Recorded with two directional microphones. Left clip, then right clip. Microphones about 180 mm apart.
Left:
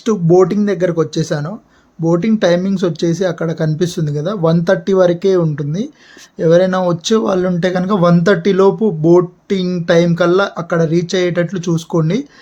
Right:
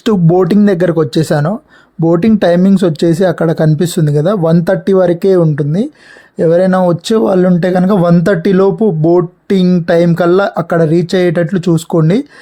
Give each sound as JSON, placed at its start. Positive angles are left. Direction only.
{"t": 0.0, "sound": "speech", "side_deg": -55}